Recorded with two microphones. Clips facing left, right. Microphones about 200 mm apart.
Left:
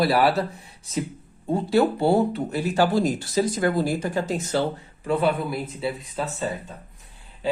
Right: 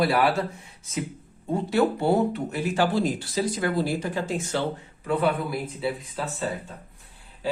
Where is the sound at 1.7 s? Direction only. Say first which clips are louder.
Left 2 dB; 30° left (ahead or behind).